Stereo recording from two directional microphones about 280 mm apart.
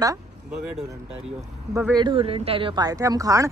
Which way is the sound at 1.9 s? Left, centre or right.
Centre.